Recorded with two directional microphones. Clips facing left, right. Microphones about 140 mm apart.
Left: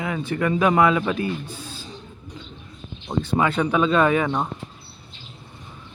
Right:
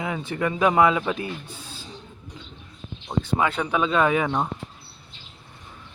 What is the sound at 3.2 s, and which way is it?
Speech, 10° right (ahead or behind).